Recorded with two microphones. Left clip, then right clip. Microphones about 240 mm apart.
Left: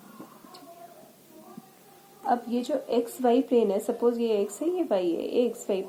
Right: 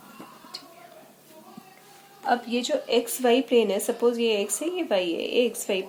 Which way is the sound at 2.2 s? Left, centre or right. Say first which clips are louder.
Right 2 dB; right.